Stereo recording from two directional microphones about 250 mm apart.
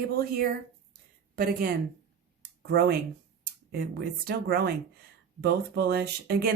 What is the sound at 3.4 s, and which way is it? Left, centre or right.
Speech, right.